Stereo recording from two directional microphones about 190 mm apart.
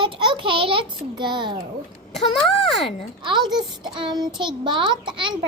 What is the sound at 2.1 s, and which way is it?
Speech, centre (ahead or behind).